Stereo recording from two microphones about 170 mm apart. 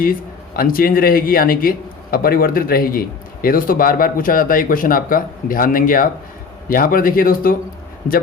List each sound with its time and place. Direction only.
0.5 s a man's voice: 60° left (ahead or behind)